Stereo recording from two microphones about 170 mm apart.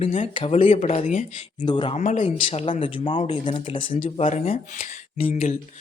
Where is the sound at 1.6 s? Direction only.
25° left (ahead or behind).